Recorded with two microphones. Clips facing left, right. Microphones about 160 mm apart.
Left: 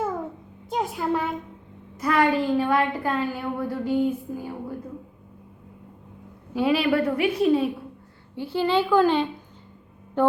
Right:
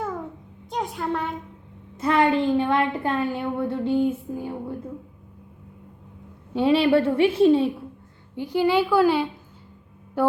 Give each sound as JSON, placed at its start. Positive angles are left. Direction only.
{"t": 0.7, "sound": "a sound", "side_deg": 0}
{"t": 2.0, "sound": "a woman's voice", "side_deg": -25}
{"t": 6.5, "sound": "a woman's voice", "side_deg": -25}
{"t": 8.4, "sound": "a woman's voice", "side_deg": -15}
{"t": 10.2, "sound": "music", "side_deg": -10}